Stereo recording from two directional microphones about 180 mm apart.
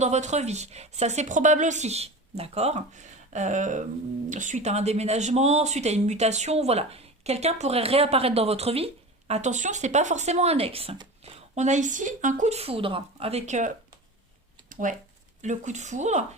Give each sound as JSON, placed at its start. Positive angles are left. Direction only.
{"t": 0.0, "sound": "speech", "side_deg": -40}
{"t": 14.7, "sound": "a sound", "side_deg": -45}
{"t": 15.4, "sound": "speech", "side_deg": -40}